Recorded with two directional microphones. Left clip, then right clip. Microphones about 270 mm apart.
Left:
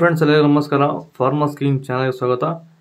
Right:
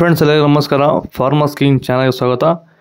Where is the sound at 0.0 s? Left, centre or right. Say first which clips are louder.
Right 3 dB; right.